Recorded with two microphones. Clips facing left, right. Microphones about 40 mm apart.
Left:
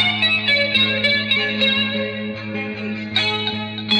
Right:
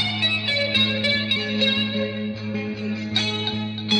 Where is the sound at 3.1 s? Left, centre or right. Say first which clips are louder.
Left 6 dB; left.